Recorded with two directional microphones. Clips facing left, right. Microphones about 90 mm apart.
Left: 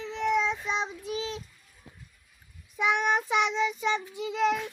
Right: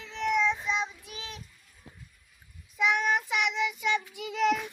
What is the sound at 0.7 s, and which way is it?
Child singing, 30° left (ahead or behind).